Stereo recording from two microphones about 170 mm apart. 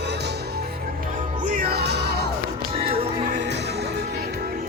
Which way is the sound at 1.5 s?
65° right (ahead or behind).